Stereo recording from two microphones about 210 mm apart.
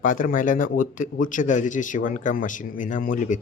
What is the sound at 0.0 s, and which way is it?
Speech, 40° left (ahead or behind).